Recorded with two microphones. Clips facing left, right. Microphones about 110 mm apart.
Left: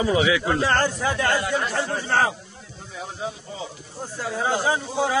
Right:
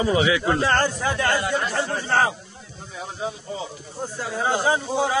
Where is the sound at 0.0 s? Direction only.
Centre (ahead or behind).